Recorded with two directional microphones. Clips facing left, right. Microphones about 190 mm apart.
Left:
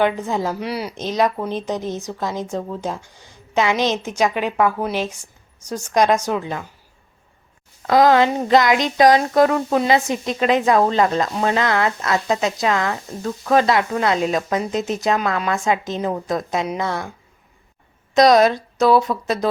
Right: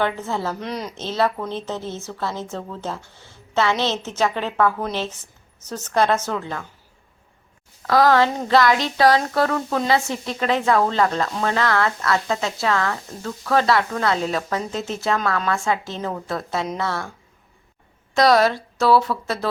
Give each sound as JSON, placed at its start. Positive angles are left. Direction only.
{"t": 0.0, "sound": "speech", "side_deg": 15}
{"t": 7.8, "sound": "speech", "side_deg": 20}